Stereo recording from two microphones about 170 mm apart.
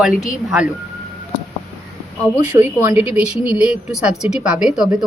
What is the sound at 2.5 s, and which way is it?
A woman's voice, 10° right (ahead or behind).